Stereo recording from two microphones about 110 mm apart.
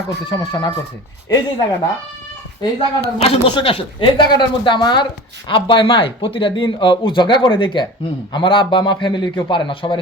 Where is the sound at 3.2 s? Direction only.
55° left (ahead or behind).